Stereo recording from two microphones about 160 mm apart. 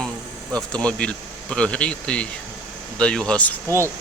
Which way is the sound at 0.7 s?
5° left (ahead or behind).